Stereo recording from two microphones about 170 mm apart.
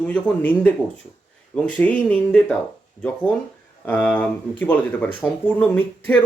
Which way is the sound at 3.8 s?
10° left (ahead or behind).